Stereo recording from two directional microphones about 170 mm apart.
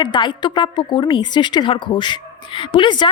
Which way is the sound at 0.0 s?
25° left (ahead or behind).